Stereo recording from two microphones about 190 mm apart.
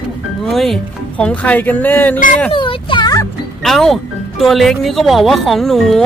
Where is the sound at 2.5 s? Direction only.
25° left (ahead or behind).